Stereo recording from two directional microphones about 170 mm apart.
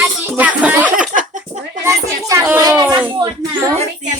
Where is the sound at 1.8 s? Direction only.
15° right (ahead or behind).